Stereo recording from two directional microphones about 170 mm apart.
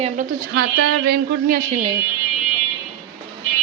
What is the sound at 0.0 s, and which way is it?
A woman's voice, 55° right (ahead or behind).